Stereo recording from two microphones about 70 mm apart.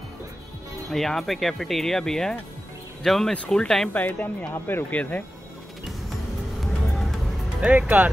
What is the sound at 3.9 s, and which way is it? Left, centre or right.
Speech, left.